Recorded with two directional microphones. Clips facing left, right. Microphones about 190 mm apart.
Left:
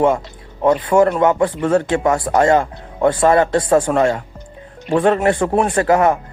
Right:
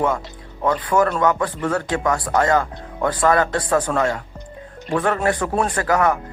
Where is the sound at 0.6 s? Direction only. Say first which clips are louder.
Left 5 dB; 25° left (ahead or behind).